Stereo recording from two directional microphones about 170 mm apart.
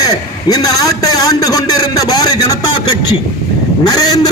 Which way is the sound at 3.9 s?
20° left (ahead or behind).